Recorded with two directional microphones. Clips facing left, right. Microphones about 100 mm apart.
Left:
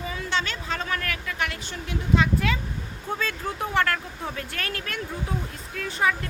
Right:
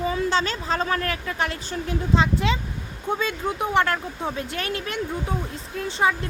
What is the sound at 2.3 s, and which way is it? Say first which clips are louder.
Speech: right 2 dB; 20° right (ahead or behind).